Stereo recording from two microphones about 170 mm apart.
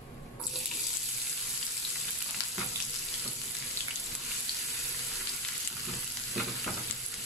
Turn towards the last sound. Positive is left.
turn(degrees=0)  # may be behind; listen again after turning